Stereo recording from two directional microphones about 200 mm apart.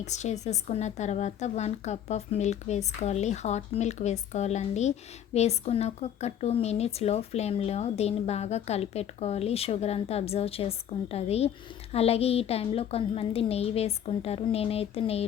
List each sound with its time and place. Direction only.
0.0 s a woman's voice: 35° left (ahead or behind)